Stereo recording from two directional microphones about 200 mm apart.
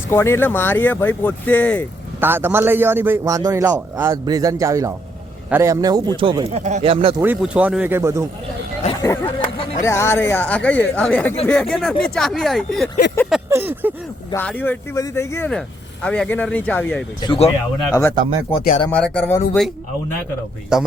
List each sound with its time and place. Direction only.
0.1 s speech: 10° left (ahead or behind)
2.2 s a man's voice: 10° right (ahead or behind); by 7.2 s 25° right (ahead or behind)
7.2 s a man's voice: 5° right (ahead or behind)
9.0 s speech: 15° left (ahead or behind)
13.5 s a man's voice: 10° right (ahead or behind)
14.3 s speech: 10° left (ahead or behind)
17.2 s speech: 25° left (ahead or behind)
18.1 s speech: 25° right (ahead or behind)
18.9 s speech: 5° left (ahead or behind)
20.7 s speech: centre (ahead or behind)